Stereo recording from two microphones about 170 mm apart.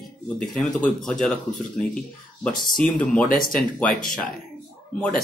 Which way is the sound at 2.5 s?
25° left (ahead or behind).